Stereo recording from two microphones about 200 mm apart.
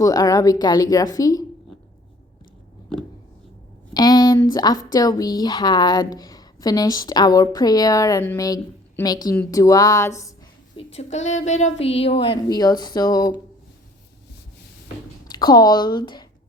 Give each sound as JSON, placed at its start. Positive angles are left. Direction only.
{"t": 0.0, "sound": "a woman's voice", "side_deg": 20}
{"t": 3.9, "sound": "a woman's voice", "side_deg": 20}
{"t": 10.8, "sound": "a woman's voice", "side_deg": 30}
{"t": 15.3, "sound": "speech", "side_deg": 20}